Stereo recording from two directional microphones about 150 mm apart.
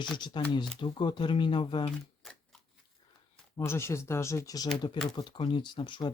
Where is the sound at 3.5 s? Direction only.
20° left (ahead or behind).